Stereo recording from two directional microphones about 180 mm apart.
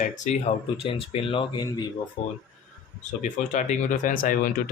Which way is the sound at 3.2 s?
45° left (ahead or behind).